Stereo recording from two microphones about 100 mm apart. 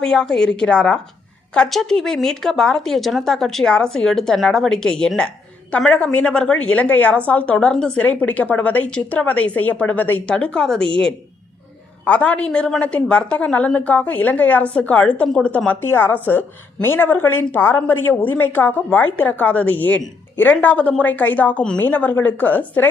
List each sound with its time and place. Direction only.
0.0 s a woman's voice: 5° left (ahead or behind)
12.0 s a woman's voice: 15° left (ahead or behind)